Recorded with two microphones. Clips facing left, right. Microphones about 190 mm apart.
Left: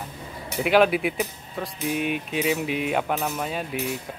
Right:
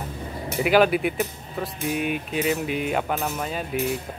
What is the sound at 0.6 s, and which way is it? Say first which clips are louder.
Speech: right 1 dB; centre (ahead or behind).